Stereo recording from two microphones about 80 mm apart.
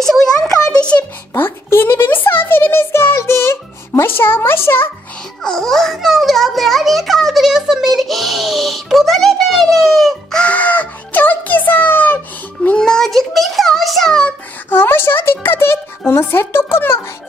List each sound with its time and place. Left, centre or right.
0.0 s a sound: centre
1.3 s a child's voice: left
5.4 s a child's voice: centre
10.4 s a child's voice: centre
12.6 s a child's voice: centre
14.7 s a child's voice: left